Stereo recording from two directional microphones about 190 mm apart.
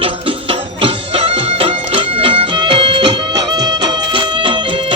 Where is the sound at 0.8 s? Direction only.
30° right (ahead or behind).